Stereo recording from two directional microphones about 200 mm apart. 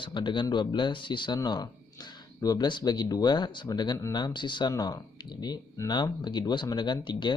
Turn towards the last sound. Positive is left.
turn(degrees=20)  # may be behind; listen again after turning